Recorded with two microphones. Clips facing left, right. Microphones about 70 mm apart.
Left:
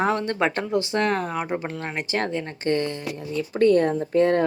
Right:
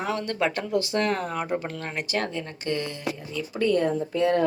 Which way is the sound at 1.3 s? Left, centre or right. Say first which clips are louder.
Left 1 dB; centre.